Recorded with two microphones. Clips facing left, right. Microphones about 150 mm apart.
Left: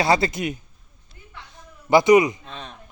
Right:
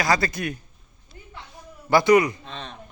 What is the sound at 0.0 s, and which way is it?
Speech, 25° left (ahead or behind).